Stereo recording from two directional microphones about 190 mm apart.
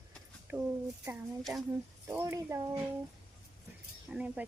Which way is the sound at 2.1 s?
15° right (ahead or behind).